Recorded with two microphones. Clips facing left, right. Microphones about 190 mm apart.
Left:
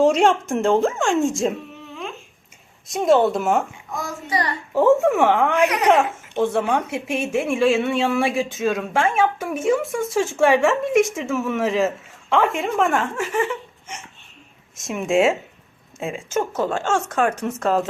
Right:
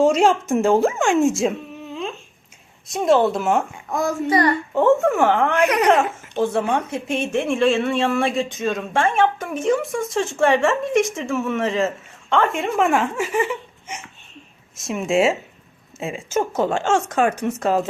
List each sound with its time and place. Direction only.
0.0 s speech: centre (ahead or behind)
2.8 s speech: centre (ahead or behind)
3.9 s a child's voice: 50° right (ahead or behind)
4.7 s speech: 5° left (ahead or behind)
16.4 s speech: 15° right (ahead or behind)